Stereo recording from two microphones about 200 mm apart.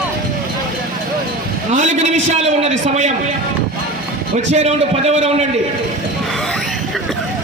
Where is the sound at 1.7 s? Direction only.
35° right (ahead or behind).